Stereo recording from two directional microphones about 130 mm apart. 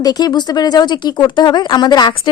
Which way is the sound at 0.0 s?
30° left (ahead or behind).